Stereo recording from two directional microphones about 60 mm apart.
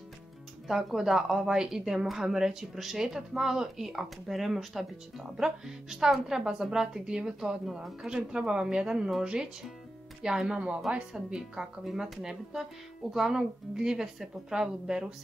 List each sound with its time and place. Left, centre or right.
0.7 s a woman's voice: centre